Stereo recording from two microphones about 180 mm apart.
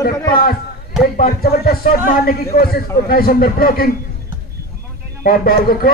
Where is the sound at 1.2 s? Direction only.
55° left (ahead or behind).